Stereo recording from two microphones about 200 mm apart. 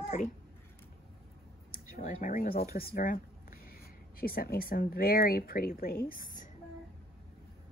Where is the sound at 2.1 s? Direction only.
40° left (ahead or behind).